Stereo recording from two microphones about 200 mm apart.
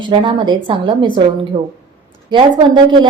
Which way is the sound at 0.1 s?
25° right (ahead or behind).